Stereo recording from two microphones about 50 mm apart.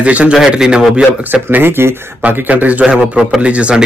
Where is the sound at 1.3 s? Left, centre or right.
Right.